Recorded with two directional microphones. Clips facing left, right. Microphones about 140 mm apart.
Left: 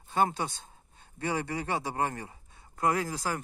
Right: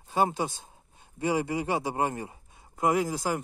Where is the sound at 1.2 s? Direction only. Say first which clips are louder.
Right 5 dB; 15° right (ahead or behind).